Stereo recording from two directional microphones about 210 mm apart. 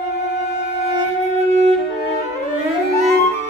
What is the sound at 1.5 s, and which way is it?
Music, 30° right (ahead or behind).